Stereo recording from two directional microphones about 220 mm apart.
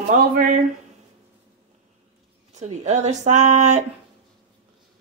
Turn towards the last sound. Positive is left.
turn(degrees=-30)  # may be behind; listen again after turning